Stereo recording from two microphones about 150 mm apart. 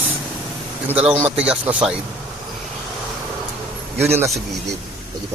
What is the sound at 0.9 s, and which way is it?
Speech, 10° right (ahead or behind).